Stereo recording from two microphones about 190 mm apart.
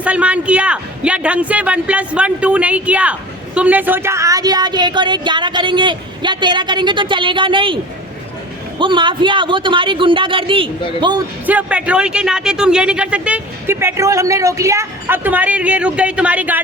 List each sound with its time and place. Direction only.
0.0 s a man's voice: 5° right (ahead or behind); by 7.8 s 25° right (ahead or behind)
8.8 s a man's voice: 25° right (ahead or behind)
11.4 s a man's voice: 5° right (ahead or behind)